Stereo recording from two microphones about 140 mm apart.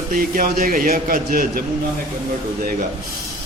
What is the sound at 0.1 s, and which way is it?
A man's voice, 90° right.